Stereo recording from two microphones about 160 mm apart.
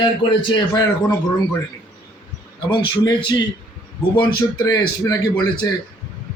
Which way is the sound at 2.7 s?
30° left (ahead or behind).